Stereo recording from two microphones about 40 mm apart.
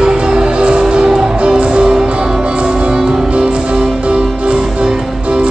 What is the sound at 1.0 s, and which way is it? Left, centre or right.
Music, centre.